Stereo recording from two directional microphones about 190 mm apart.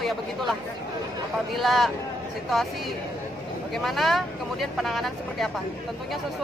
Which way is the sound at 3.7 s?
Centre (ahead or behind).